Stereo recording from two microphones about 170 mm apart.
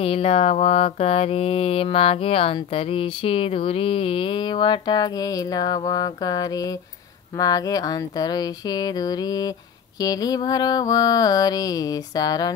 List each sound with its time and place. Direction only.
0.0 s mantra: 35° left (ahead or behind)